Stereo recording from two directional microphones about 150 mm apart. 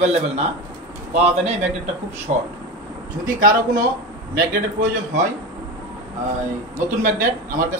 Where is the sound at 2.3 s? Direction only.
45° right (ahead or behind).